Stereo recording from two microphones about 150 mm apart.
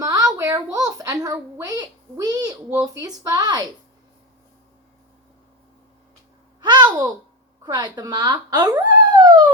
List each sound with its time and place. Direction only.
0.0 s a sound: 25° right (ahead or behind)
2.7 s speech: 25° right (ahead or behind)
6.6 s babbling: 30° right (ahead or behind)
7.6 s speech: 30° right (ahead or behind)